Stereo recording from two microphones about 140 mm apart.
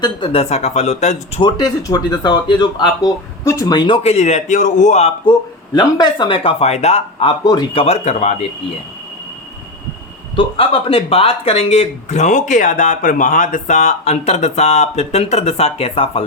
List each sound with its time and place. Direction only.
0.0 s speech: 35° left (ahead or behind)
0.4 s speech: 50° left (ahead or behind)
1.4 s speech: 30° left (ahead or behind); by 5.1 s 55° left (ahead or behind)
5.7 s speech: 30° left (ahead or behind)
8.0 s speech: 55° left (ahead or behind)
10.3 s speech: 40° left (ahead or behind)